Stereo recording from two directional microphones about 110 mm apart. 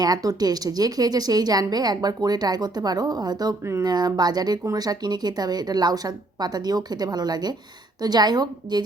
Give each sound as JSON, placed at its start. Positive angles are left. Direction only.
{"t": 0.0, "sound": "speech", "side_deg": -35}